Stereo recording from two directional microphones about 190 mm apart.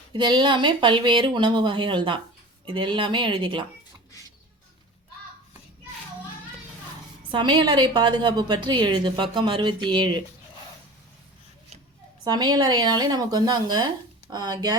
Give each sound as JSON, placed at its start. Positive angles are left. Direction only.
{"t": 0.1, "sound": "speech", "side_deg": -25}
{"t": 7.3, "sound": "speech", "side_deg": -25}
{"t": 12.2, "sound": "speech", "side_deg": -20}